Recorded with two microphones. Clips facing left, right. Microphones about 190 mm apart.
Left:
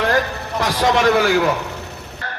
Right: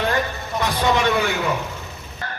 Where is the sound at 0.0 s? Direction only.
70° left (ahead or behind).